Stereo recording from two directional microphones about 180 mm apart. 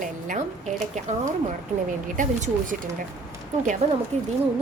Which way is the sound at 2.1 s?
45° right (ahead or behind).